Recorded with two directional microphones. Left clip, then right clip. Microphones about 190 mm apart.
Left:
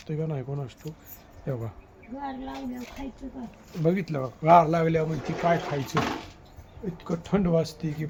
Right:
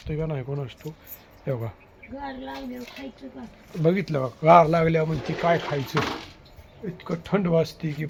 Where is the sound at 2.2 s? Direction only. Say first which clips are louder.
Right 1 dB; 5° right (ahead or behind).